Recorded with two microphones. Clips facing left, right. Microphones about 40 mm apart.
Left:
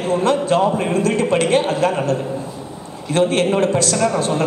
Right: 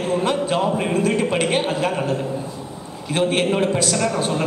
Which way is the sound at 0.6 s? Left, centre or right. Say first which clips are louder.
Left 3 dB; centre.